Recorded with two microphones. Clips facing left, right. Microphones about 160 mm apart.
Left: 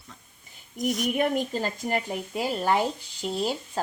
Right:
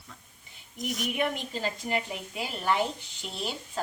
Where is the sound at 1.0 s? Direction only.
45° left (ahead or behind).